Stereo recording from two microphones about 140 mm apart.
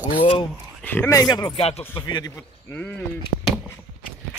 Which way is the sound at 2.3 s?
15° left (ahead or behind).